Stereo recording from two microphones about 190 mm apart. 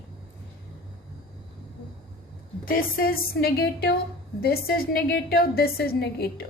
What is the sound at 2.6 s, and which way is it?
A woman's voice, 50° left (ahead or behind).